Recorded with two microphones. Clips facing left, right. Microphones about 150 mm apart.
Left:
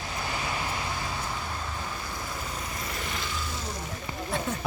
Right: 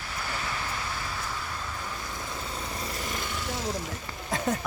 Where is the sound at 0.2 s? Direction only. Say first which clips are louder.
Left 2 dB; 15° left (ahead or behind).